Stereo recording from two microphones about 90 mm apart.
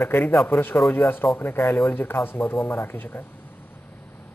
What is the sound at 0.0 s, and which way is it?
A man's voice, 25° left (ahead or behind).